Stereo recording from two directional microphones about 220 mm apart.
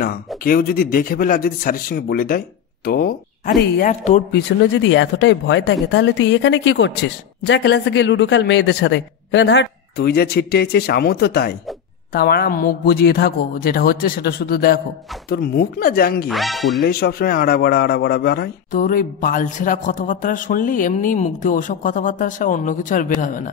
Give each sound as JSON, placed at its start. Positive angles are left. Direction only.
{"t": 0.4, "sound": "speech", "side_deg": 40}
{"t": 4.8, "sound": "a man's voice", "side_deg": 55}
{"t": 16.3, "sound": "speech", "side_deg": 0}
{"t": 16.8, "sound": "speech", "side_deg": 45}